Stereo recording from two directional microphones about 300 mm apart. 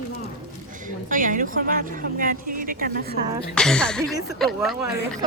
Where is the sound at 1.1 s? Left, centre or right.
Right.